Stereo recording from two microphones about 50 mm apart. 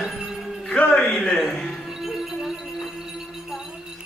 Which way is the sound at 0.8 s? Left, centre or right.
Left.